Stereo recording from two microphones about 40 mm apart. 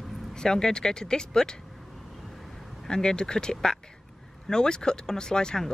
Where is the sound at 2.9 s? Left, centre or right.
Centre.